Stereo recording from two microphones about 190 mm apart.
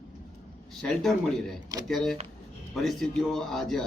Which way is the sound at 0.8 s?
5° left (ahead or behind).